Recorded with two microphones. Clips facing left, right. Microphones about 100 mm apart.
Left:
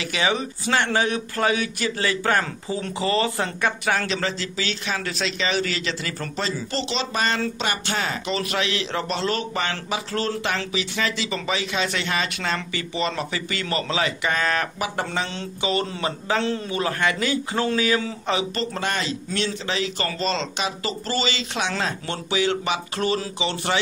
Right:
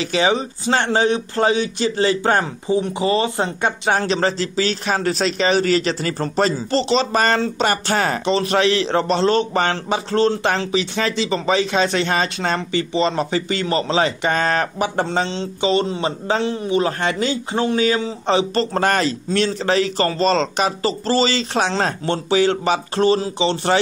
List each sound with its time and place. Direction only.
0.0 s speech: 30° right (ahead or behind)
8.3 s speech: 30° right (ahead or behind)